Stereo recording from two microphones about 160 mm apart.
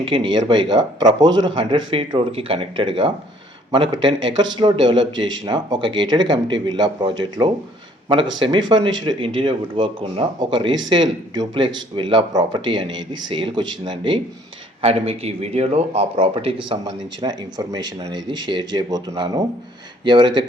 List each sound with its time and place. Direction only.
0.0 s a man's voice: 30° right (ahead or behind)